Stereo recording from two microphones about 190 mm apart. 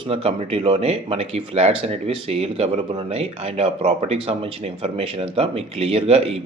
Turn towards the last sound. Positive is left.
turn(degrees=-30)  # may be behind; listen again after turning